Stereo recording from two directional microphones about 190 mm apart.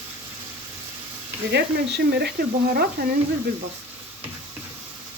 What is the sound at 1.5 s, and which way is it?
Speech, 60° right (ahead or behind).